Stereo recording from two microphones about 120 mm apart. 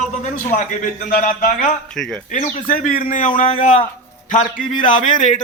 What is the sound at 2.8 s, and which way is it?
A man's voice, 90° left.